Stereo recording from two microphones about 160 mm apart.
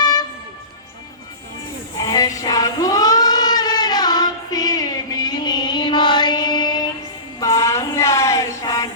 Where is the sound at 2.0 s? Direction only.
20° left (ahead or behind).